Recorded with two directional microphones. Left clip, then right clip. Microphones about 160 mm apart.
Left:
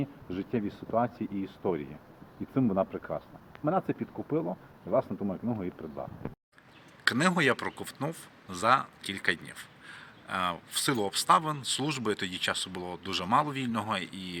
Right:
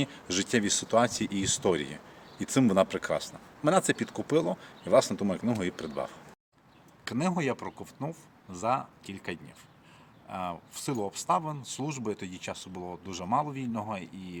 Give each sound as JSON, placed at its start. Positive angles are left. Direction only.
{"t": 0.0, "sound": "speech", "side_deg": -20}
{"t": 7.0, "sound": "speech", "side_deg": -10}
{"t": 11.0, "sound": "speech", "side_deg": -10}